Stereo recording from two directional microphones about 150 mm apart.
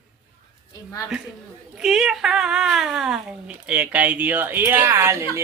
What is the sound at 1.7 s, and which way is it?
Speech, centre (ahead or behind).